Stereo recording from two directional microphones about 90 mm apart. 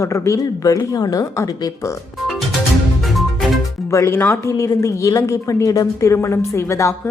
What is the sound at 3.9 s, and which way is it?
A woman's voice, 30° left (ahead or behind).